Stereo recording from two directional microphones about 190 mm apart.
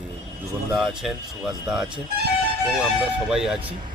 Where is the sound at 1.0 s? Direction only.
Centre (ahead or behind).